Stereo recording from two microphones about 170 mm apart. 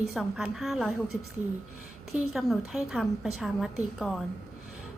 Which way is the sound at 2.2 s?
5° right (ahead or behind).